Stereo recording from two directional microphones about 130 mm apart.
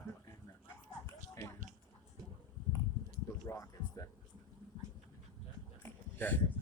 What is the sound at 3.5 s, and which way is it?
Music, 25° left (ahead or behind).